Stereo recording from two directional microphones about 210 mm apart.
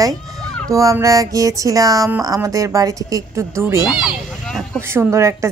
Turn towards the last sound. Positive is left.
turn(degrees=-15)  # may be behind; listen again after turning